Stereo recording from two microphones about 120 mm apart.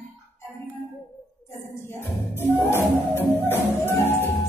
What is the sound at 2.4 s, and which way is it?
Music, 20° left (ahead or behind).